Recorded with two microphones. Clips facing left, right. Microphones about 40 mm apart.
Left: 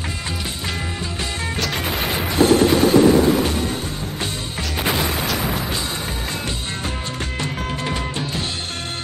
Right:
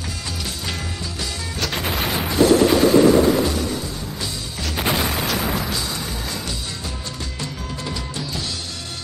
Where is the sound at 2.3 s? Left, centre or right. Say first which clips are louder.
Even; left.